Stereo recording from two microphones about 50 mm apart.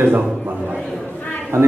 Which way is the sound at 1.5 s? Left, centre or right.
Right.